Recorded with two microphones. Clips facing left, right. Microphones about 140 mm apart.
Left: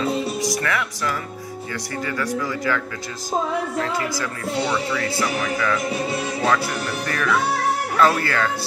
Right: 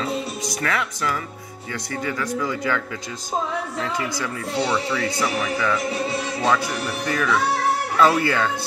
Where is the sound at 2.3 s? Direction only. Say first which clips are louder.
Even; 20° right (ahead or behind).